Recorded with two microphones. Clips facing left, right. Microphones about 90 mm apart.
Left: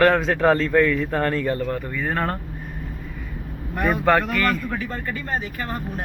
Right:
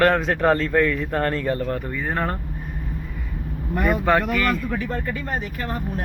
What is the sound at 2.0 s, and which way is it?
Speech, 10° right (ahead or behind).